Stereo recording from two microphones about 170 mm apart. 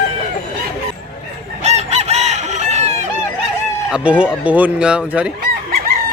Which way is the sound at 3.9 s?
5° right (ahead or behind).